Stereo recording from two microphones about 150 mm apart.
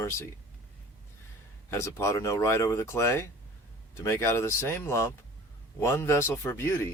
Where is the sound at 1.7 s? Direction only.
20° left (ahead or behind).